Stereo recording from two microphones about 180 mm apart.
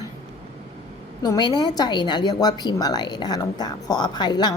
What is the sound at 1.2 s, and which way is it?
A woman's voice, 25° left (ahead or behind).